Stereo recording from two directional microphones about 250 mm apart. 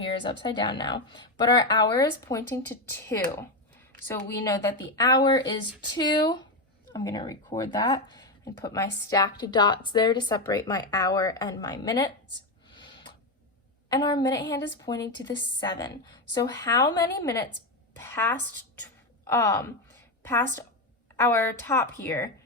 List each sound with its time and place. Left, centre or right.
0.2 s a woman's voice: centre
12.7 s a sound: centre
13.9 s a woman's voice: centre
21.2 s a woman's voice: centre